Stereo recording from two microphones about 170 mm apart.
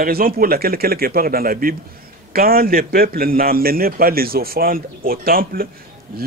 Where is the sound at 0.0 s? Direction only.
60° right (ahead or behind).